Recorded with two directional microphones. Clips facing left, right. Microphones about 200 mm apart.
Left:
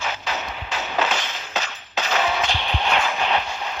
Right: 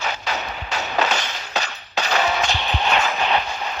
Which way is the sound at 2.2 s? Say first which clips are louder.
Right 1 dB; 40° right (ahead or behind).